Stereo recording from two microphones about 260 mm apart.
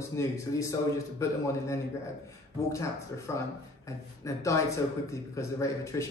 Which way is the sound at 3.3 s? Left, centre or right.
Centre.